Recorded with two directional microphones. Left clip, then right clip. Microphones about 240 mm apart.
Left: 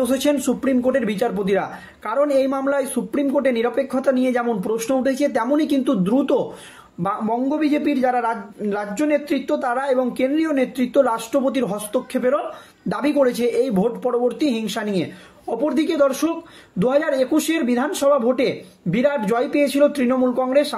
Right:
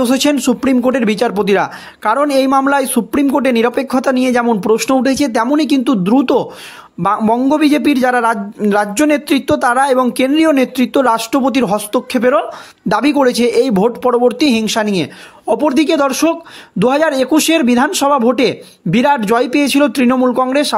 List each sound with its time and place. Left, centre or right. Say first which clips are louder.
0.0 s a man's voice: right 6 dB; right